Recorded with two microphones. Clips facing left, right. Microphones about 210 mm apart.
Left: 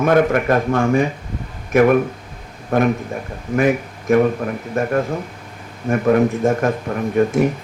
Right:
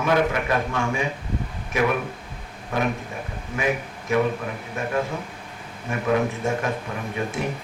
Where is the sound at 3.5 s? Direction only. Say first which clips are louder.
Left 9 dB; 50° left (ahead or behind).